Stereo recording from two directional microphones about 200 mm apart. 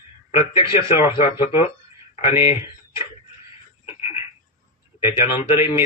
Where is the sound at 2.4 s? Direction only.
15° right (ahead or behind).